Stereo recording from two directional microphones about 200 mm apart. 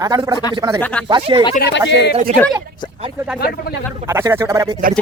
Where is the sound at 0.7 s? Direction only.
10° left (ahead or behind).